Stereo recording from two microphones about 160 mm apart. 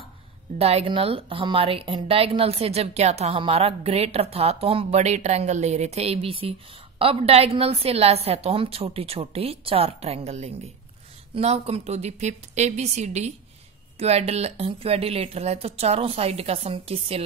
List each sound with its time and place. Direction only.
0.6 s a woman's voice: 40° right (ahead or behind)